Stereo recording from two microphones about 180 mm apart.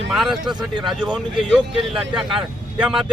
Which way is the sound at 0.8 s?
5° right (ahead or behind).